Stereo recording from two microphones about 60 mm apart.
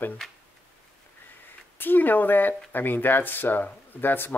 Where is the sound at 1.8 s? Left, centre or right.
Left.